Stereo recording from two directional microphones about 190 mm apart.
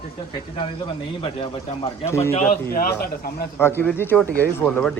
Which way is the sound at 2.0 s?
15° left (ahead or behind).